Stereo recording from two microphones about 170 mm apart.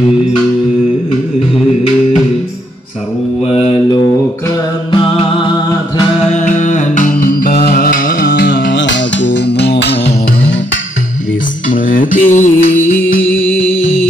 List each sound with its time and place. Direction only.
3.4 s mantra: 35° left (ahead or behind)
4.9 s music: 30° left (ahead or behind)
6.3 s music: 45° left (ahead or behind); by 10.1 s 75° left (ahead or behind)
11.7 s mantra: 50° left (ahead or behind)